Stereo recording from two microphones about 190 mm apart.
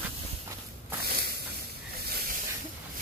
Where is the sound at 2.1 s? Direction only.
50° right (ahead or behind).